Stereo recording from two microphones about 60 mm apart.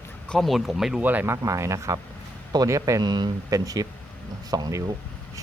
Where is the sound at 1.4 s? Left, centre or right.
Right.